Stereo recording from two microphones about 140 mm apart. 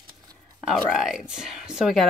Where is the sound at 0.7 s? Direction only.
Centre (ahead or behind).